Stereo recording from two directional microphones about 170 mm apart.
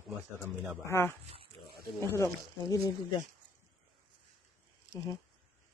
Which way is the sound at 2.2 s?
20° left (ahead or behind).